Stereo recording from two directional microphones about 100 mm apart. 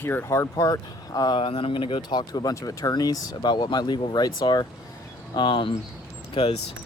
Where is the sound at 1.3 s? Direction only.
60° left (ahead or behind).